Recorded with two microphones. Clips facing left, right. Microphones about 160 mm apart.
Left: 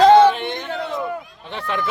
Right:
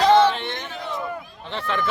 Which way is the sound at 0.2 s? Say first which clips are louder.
Left 5 dB; 50° left (ahead or behind).